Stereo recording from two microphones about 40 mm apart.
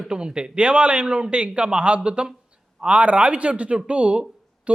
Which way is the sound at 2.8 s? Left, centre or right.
Right.